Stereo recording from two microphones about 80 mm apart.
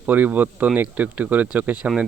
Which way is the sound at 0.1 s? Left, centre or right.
Right.